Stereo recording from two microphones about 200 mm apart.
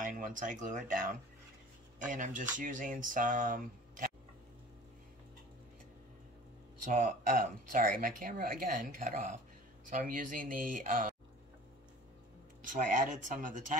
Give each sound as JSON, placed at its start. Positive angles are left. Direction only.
{"t": 0.0, "sound": "speech", "side_deg": -40}
{"t": 6.9, "sound": "speech", "side_deg": -40}
{"t": 12.6, "sound": "speech", "side_deg": -40}